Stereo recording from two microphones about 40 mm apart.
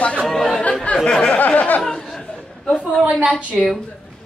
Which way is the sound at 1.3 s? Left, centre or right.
Left.